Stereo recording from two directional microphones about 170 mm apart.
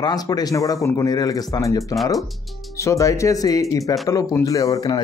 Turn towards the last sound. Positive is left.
turn(degrees=25)  # may be behind; listen again after turning